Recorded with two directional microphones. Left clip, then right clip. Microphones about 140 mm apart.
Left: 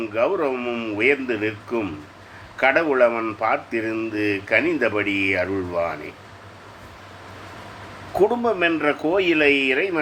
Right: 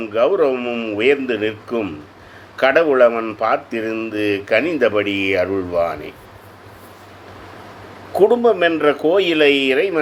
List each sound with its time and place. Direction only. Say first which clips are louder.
0.0 s speech: right 6 dB; 25° right (ahead or behind)
8.1 s speech: right 6 dB; 25° right (ahead or behind)